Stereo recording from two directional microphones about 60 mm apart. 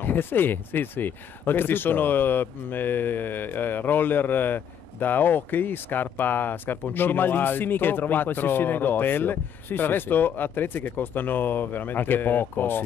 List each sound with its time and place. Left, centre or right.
0.0 s speech: left